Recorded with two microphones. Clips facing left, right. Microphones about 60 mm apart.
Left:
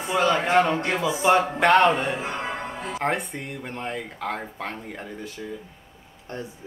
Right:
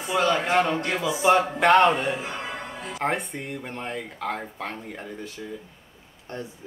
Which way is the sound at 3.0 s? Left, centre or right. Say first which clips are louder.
Even; centre.